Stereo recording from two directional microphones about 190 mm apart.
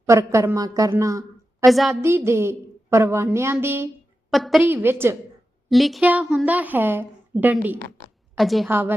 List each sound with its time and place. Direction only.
0.0 s a woman's voice: 15° right (ahead or behind)
1.6 s a woman's voice: centre (ahead or behind)
2.0 s a woman's voice: 15° right (ahead or behind)
4.3 s a woman's voice: centre (ahead or behind)
4.6 s a woman's voice: 10° right (ahead or behind)
5.6 s a woman's voice: centre (ahead or behind)
8.7 s a woman's voice: 10° right (ahead or behind)